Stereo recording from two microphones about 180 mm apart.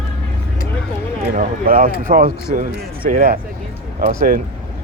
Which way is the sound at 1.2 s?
50° right (ahead or behind).